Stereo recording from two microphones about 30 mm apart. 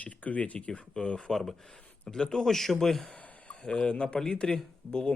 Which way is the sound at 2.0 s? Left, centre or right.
Left.